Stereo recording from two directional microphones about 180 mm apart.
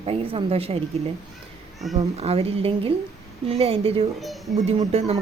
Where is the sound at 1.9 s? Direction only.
35° right (ahead or behind).